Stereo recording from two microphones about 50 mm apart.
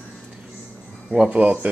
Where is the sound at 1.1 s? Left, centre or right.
Right.